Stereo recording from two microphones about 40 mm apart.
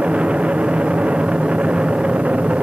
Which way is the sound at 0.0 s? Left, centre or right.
Right.